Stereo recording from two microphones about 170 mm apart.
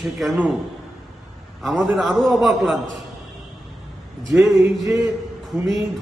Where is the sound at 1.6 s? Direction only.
Centre (ahead or behind).